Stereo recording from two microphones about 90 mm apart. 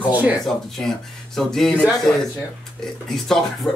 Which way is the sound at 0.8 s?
5° left (ahead or behind).